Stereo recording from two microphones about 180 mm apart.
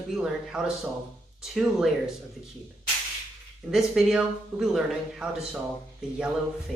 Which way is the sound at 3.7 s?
Centre (ahead or behind).